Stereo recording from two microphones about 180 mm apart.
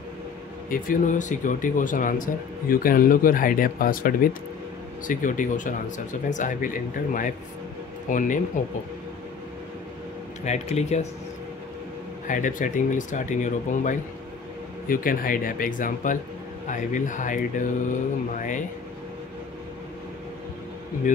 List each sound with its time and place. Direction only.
0.7 s speech: 50° left (ahead or behind)
10.4 s speech: 40° left (ahead or behind)
12.3 s speech: 45° left (ahead or behind)